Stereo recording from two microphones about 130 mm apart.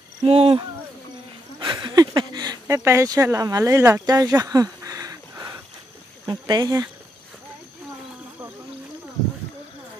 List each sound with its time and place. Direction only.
0.2 s speech: 50° right (ahead or behind)
1.6 s a sound: 35° right (ahead or behind)
6.2 s speech: 30° right (ahead or behind)